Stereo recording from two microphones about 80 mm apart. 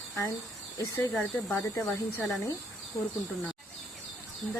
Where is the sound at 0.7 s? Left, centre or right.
Left.